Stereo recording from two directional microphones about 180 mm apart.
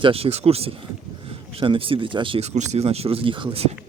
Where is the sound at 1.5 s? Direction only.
30° right (ahead or behind).